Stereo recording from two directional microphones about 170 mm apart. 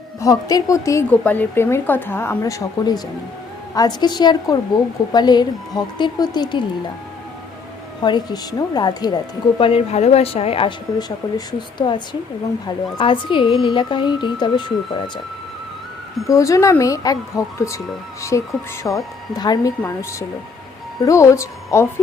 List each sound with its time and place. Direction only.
0.2 s a woman's voice: 20° left (ahead or behind)
8.0 s speech: 25° left (ahead or behind)
16.2 s a woman's voice: 20° left (ahead or behind)